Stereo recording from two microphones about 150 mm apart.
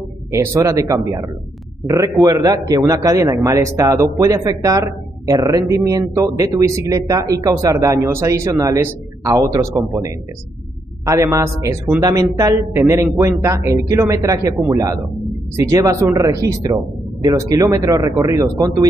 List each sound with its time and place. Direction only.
0.3 s speech: 15° right (ahead or behind)
11.1 s speech: 20° right (ahead or behind)